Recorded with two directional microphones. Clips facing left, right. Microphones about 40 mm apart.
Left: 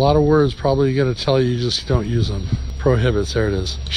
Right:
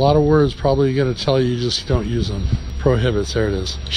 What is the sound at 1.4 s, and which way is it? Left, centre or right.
Speech, right.